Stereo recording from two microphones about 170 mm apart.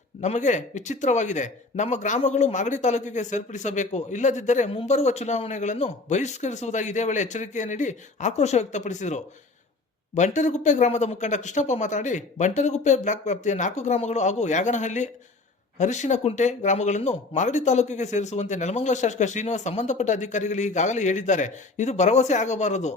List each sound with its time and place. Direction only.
0.2 s a man's voice: 45° left (ahead or behind)